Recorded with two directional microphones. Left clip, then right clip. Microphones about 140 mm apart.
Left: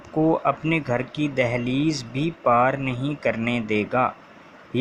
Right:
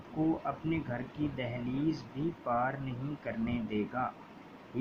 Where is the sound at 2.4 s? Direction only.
40° left (ahead or behind).